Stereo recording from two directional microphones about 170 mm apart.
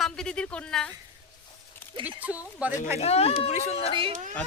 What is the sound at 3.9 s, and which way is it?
Speech, 30° right (ahead or behind).